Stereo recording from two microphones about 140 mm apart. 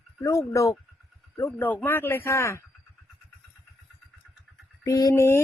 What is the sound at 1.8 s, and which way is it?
Speech, 15° left (ahead or behind).